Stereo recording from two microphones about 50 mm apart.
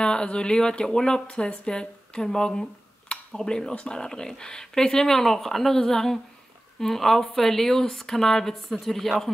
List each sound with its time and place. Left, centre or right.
0.0 s speech: centre